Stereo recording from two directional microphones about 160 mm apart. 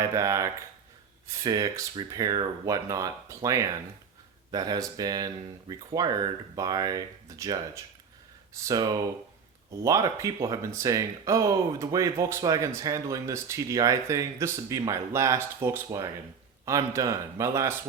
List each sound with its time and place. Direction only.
0.0 s speech: 20° right (ahead or behind)